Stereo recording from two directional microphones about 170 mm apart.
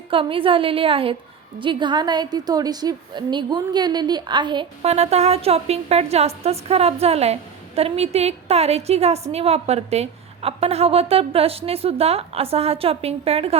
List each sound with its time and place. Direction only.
0.1 s a woman's voice: 30° right (ahead or behind)
4.9 s a woman's voice: 40° right (ahead or behind)